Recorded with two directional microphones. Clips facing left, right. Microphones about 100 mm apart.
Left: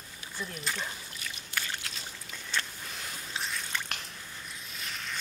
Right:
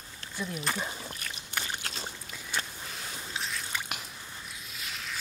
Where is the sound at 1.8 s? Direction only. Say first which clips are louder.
Right 4 dB; 35° right (ahead or behind).